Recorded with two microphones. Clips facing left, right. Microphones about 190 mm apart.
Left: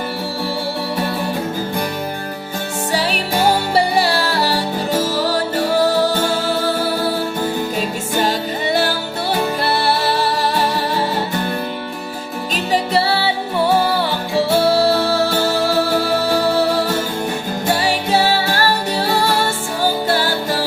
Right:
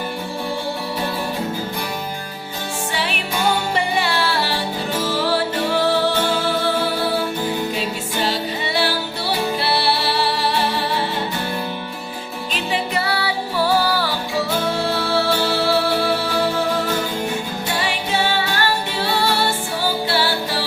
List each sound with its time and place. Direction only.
2.9 s music: 40° left (ahead or behind)
12.5 s music: 35° left (ahead or behind)
14.8 s music: 40° left (ahead or behind)
17.7 s music: 40° left (ahead or behind)